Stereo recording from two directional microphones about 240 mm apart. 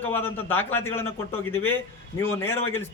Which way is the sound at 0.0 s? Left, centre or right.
Centre.